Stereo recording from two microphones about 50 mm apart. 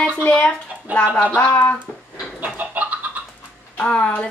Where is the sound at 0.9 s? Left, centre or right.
Right.